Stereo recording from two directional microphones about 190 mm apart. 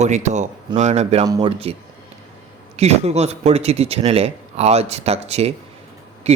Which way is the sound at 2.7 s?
35° right (ahead or behind).